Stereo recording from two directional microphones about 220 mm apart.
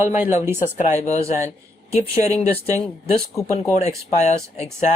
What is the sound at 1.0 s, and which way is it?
Speech, 30° left (ahead or behind).